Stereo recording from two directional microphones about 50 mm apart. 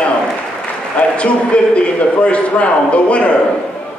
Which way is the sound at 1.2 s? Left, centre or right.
Left.